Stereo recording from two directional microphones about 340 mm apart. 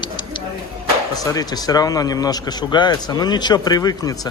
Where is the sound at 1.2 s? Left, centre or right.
Centre.